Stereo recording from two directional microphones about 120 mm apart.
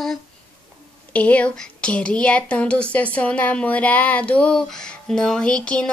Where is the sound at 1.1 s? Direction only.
10° left (ahead or behind).